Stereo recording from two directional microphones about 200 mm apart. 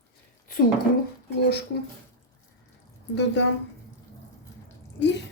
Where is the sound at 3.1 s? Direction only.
60° left (ahead or behind).